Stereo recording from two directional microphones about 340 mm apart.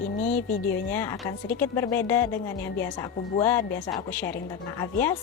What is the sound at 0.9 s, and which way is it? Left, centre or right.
A woman's voice, centre.